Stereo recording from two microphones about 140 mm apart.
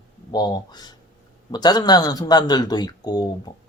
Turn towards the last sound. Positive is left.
turn(degrees=30)  # may be behind; listen again after turning